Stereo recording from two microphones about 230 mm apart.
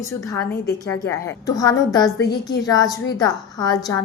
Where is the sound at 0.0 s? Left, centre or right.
Centre.